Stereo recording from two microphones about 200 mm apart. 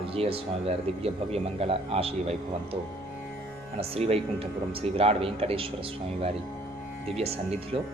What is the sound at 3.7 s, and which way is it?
Speech, 30° right (ahead or behind).